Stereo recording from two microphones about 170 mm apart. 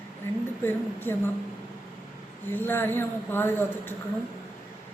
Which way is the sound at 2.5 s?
10° left (ahead or behind).